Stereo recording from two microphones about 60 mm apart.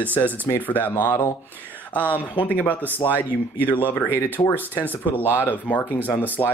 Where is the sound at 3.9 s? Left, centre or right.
Left.